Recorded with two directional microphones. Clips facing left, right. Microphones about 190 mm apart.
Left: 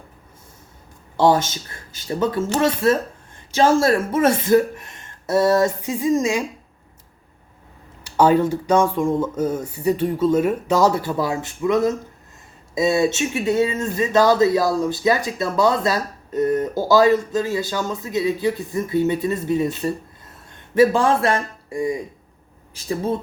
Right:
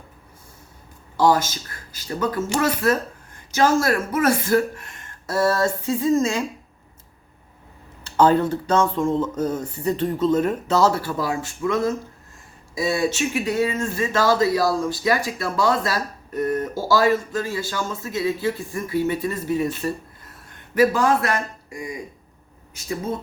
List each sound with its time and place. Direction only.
1.1 s speech: 25° left (ahead or behind)
8.0 s speech: 10° left (ahead or behind); by 21.8 s 30° left (ahead or behind)